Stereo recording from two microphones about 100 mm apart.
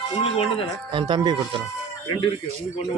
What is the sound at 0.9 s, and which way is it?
Speech, 55° right (ahead or behind).